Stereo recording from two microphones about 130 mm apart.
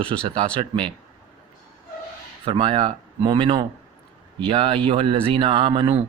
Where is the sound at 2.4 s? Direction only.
45° right (ahead or behind).